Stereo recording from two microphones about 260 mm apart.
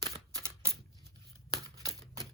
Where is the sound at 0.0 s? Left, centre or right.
Centre.